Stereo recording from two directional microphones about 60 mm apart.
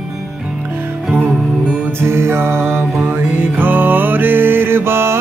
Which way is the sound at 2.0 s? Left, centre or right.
Right.